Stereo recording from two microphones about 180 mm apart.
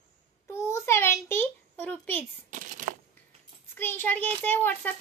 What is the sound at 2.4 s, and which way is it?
Speech, 45° right (ahead or behind).